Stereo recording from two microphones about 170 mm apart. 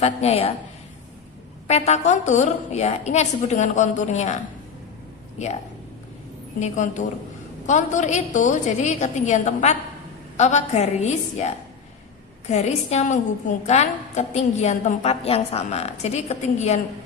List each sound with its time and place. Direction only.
0.0 s a woman's voice: 40° left (ahead or behind)
1.6 s a woman's voice: 40° left (ahead or behind)
6.6 s a woman's voice: 45° left (ahead or behind)